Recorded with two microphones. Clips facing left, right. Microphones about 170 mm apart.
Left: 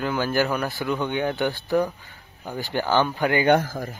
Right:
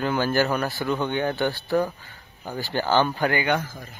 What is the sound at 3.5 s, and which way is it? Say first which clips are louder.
Speech: left 6 dB; 75° left (ahead or behind).